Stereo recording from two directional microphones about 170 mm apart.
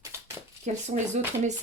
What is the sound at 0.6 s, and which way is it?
Speech, 45° right (ahead or behind).